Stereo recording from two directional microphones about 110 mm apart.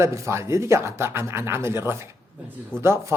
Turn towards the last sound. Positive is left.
turn(degrees=-25)  # may be behind; listen again after turning